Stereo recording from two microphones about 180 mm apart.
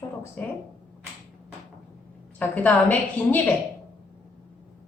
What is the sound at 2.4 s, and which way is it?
A woman's voice, 10° left (ahead or behind).